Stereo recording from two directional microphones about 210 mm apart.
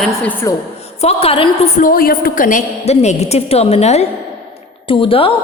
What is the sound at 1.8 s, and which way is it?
A woman's voice, 45° left (ahead or behind).